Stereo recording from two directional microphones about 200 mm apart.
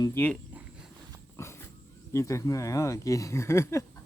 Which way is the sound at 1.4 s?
15° left (ahead or behind).